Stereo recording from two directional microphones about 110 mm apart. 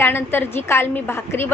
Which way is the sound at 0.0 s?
20° left (ahead or behind).